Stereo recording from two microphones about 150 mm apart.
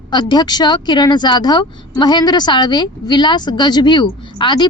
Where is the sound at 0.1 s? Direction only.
30° left (ahead or behind).